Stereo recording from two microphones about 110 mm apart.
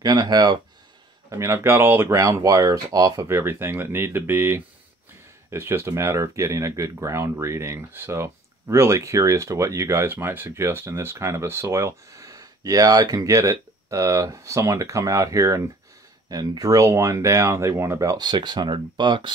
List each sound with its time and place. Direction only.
0.0 s speech: 40° right (ahead or behind)
1.3 s speech: 30° right (ahead or behind)
3.3 s speech: 20° right (ahead or behind); by 19.3 s 45° right (ahead or behind)